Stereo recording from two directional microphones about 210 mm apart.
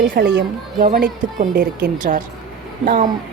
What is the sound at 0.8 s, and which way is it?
A woman's voice, 40° right (ahead or behind).